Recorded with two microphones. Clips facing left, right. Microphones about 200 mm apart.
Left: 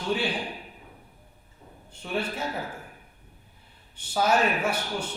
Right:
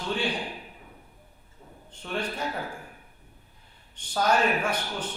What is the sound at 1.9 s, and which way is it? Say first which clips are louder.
Speech: left 2 dB; 10° left (ahead or behind).